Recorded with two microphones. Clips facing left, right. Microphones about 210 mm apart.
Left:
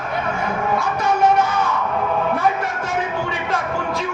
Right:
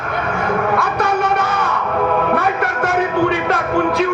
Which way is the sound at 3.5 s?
65° right (ahead or behind).